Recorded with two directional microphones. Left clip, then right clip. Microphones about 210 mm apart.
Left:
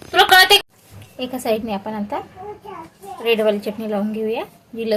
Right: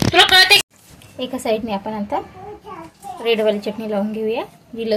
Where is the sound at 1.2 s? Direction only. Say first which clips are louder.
Right 1 dB; 5° right (ahead or behind).